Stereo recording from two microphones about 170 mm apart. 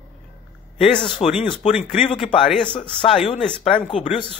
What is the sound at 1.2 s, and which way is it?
Speech, 35° left (ahead or behind).